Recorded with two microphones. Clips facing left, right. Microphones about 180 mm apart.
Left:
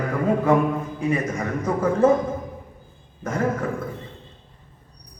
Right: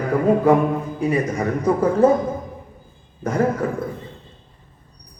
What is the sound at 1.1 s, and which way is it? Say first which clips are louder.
Speech: right 3 dB; 35° right (ahead or behind).